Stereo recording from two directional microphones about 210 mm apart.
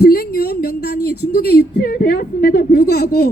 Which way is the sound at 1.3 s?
50° left (ahead or behind).